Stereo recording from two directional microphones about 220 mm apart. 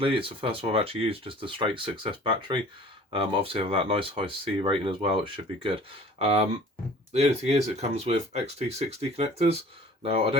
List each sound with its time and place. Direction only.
0.0 s speech: 25° right (ahead or behind)